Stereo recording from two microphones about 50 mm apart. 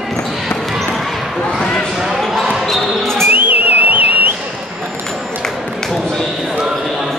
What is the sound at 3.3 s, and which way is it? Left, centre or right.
Whistle, right.